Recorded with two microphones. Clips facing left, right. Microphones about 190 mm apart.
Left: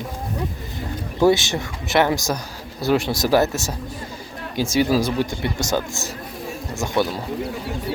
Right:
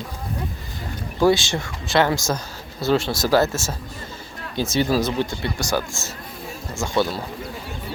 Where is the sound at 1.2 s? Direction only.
20° left (ahead or behind).